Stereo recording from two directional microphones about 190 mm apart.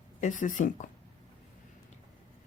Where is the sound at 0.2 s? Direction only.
40° left (ahead or behind).